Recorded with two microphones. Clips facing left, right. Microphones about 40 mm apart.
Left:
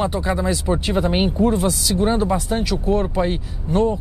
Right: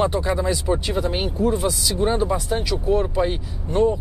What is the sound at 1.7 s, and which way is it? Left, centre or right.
Speech, centre.